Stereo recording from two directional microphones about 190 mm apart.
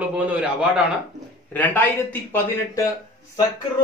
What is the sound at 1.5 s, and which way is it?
Speech, 10° left (ahead or behind).